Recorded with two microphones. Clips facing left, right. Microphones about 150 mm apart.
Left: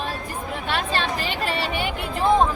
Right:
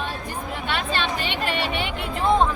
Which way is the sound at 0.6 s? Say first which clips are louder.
Left 1 dB; 40° left (ahead or behind).